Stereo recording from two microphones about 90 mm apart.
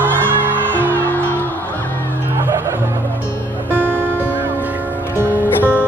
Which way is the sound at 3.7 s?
20° left (ahead or behind).